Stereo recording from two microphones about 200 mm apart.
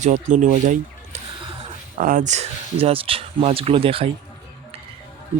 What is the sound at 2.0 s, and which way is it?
Speech, 45° right (ahead or behind).